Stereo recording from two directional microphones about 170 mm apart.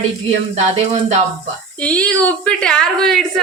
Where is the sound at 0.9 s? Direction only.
40° right (ahead or behind).